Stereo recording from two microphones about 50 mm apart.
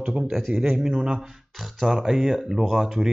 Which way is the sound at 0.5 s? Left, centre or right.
Centre.